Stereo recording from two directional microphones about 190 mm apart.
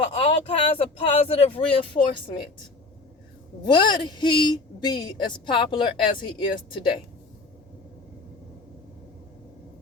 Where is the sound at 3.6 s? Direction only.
25° left (ahead or behind).